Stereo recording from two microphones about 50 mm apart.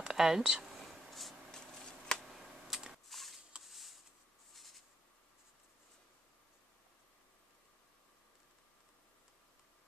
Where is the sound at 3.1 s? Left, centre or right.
Centre.